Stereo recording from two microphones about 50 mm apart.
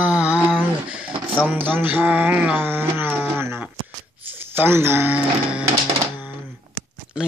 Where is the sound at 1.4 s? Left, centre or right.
Right.